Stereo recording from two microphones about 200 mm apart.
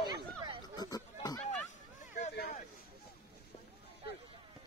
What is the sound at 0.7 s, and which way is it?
Chatter, 20° left (ahead or behind).